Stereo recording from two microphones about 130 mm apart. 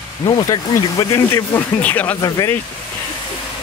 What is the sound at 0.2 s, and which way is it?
Speech, 35° left (ahead or behind).